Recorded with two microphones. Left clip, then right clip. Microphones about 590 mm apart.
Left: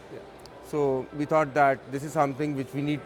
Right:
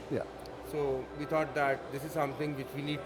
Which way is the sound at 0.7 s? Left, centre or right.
Left.